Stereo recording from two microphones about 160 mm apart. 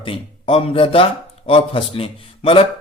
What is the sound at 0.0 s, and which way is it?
A man's voice, 35° left (ahead or behind).